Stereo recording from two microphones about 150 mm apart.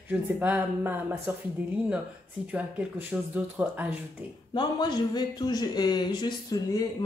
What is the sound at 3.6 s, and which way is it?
Speech, 10° right (ahead or behind).